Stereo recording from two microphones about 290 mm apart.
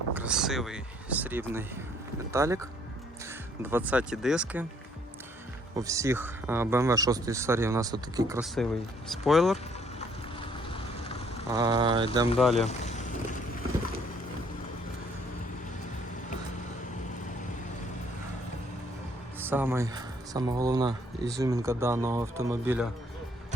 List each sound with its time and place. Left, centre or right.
0.1 s speech: centre
5.7 s speech: centre
8.6 s speech: centre
10.4 s vehicle: centre
11.5 s speech: centre
12.4 s speech: centre
12.6 s vehicle: left
19.4 s speech: centre